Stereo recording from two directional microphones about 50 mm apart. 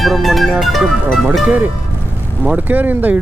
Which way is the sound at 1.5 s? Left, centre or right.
Right.